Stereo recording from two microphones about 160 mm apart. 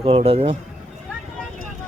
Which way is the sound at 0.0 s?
35° right (ahead or behind).